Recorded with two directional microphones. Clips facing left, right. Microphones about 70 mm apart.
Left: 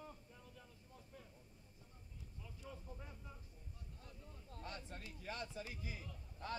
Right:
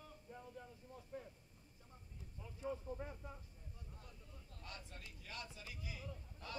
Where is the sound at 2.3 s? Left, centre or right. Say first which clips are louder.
Right 10 dB; right.